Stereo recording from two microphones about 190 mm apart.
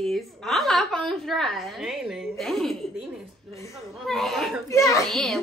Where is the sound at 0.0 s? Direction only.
Centre (ahead or behind).